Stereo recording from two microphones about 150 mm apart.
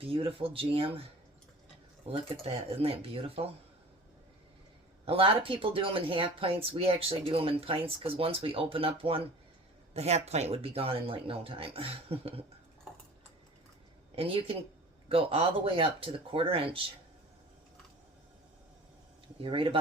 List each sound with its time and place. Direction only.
0.0 s speech: 40° right (ahead or behind)
2.0 s speech: 40° right (ahead or behind)
5.0 s speech: 40° right (ahead or behind)
14.2 s speech: 40° right (ahead or behind)
19.4 s speech: 35° right (ahead or behind)